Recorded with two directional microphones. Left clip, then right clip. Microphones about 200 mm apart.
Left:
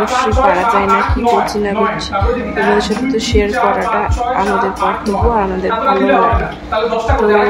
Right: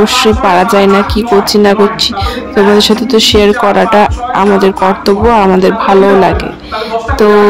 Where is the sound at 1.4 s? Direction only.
40° right (ahead or behind).